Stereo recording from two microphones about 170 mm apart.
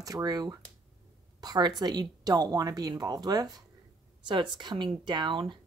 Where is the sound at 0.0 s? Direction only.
20° right (ahead or behind).